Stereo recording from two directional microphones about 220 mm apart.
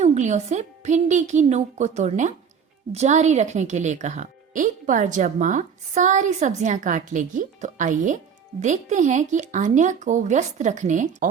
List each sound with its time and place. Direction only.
0.0 s a woman's voice: 30° right (ahead or behind)